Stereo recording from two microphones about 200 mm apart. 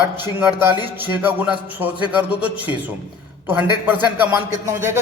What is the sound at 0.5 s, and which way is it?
Speech, 20° left (ahead or behind).